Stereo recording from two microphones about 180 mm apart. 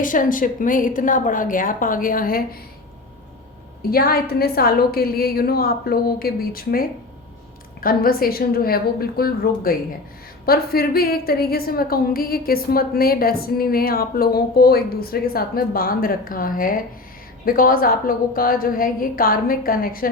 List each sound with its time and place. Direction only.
0.0 s a woman's voice: 50° left (ahead or behind)
3.8 s a woman's voice: 55° left (ahead or behind)